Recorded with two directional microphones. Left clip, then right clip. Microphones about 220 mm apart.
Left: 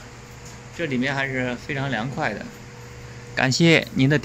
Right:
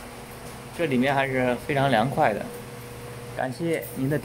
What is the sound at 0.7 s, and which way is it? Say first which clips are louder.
Speech: right 2 dB; centre (ahead or behind).